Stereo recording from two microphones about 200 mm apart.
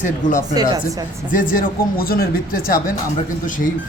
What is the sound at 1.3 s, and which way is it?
Speech, 45° left (ahead or behind).